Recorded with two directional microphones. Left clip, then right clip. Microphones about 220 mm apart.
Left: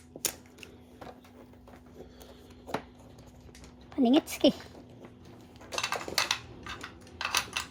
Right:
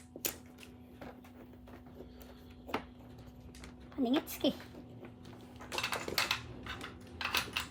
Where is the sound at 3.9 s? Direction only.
35° left (ahead or behind).